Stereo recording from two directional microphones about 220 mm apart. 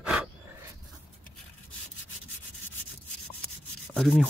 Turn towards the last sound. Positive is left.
turn(degrees=0)  # may be behind; listen again after turning